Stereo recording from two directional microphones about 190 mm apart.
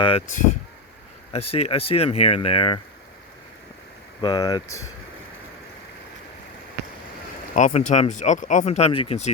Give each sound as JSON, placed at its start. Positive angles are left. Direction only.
{"t": 0.0, "sound": "speech", "side_deg": 30}
{"t": 1.3, "sound": "speech", "side_deg": 30}
{"t": 4.2, "sound": "speech", "side_deg": 20}
{"t": 7.5, "sound": "speech", "side_deg": 40}